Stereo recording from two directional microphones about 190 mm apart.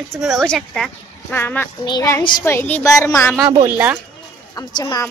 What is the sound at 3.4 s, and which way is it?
Speech, 10° right (ahead or behind).